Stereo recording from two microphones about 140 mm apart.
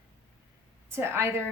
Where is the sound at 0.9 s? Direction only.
20° right (ahead or behind).